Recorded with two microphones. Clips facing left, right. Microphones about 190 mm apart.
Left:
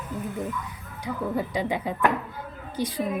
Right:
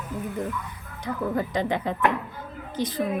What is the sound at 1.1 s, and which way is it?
A woman's voice, 10° left (ahead or behind).